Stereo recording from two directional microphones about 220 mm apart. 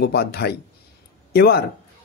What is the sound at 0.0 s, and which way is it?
Speech, 45° left (ahead or behind).